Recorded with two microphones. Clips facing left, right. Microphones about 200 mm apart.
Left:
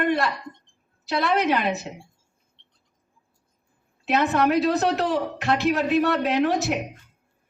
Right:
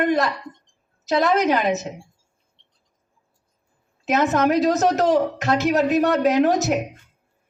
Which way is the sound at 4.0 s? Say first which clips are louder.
Right 2 dB; 40° right (ahead or behind).